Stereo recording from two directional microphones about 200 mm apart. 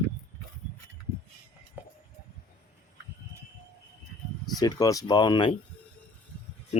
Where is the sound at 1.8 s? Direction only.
10° right (ahead or behind).